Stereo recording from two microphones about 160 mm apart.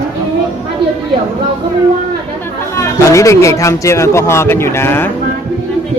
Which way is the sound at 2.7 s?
20° left (ahead or behind).